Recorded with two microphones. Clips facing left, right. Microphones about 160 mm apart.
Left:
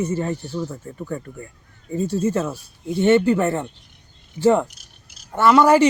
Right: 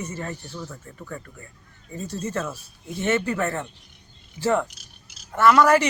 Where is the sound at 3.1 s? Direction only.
30° left (ahead or behind).